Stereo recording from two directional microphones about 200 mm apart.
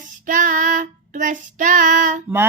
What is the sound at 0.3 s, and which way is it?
Female singing, 40° right (ahead or behind).